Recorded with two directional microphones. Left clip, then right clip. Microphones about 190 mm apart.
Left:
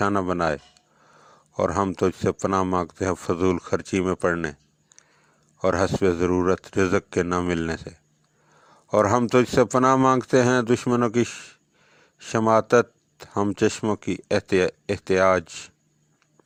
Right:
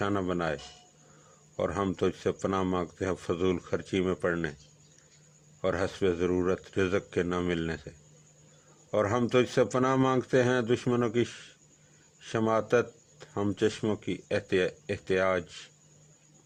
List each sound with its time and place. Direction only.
0.0 s a man's voice: 35° left (ahead or behind)
5.6 s a man's voice: 35° left (ahead or behind)